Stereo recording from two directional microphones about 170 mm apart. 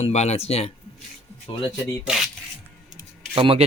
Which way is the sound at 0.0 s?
40° left (ahead or behind).